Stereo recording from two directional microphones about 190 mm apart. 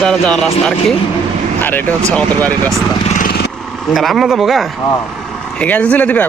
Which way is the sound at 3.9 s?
Centre (ahead or behind).